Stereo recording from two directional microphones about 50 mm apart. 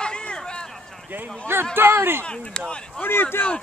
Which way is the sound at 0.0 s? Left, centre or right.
Centre.